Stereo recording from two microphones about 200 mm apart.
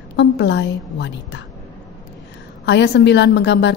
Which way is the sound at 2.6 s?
60° left (ahead or behind).